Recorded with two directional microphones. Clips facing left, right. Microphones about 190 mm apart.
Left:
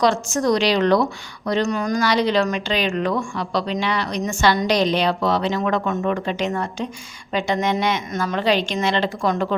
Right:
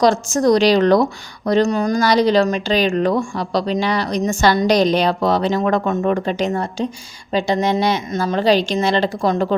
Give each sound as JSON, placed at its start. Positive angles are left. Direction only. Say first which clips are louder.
{"t": 0.0, "sound": "a woman's voice", "louder": "right 4 dB", "side_deg": -40}